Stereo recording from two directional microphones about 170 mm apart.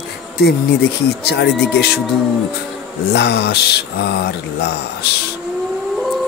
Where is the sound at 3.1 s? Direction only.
75° left (ahead or behind).